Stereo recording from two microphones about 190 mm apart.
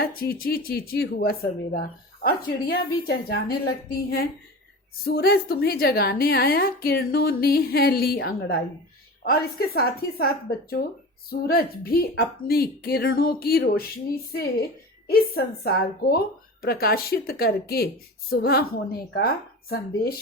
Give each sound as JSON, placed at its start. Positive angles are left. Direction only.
{"t": 0.0, "sound": "speech", "side_deg": 50}
{"t": 15.0, "sound": "speech", "side_deg": 50}